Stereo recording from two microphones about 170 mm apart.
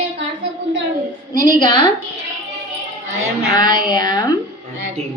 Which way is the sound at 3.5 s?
25° left (ahead or behind).